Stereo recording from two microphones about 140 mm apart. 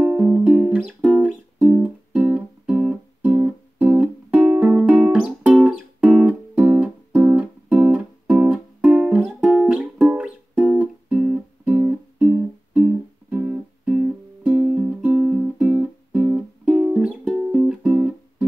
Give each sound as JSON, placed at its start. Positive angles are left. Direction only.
{"t": 0.0, "sound": "music", "side_deg": -10}